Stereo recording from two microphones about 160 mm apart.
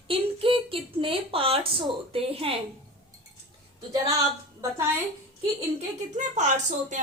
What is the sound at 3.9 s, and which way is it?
A woman's voice, 20° right (ahead or behind).